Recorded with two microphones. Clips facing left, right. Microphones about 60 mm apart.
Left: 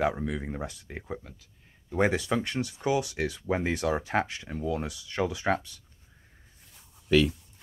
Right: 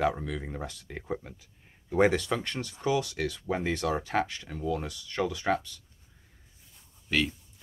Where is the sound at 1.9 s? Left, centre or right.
Centre; by 5.7 s left.